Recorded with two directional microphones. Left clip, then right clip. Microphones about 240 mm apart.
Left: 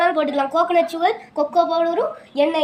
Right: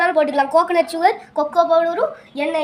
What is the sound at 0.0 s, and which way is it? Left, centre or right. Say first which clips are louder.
A woman's voice: right 2 dB; right.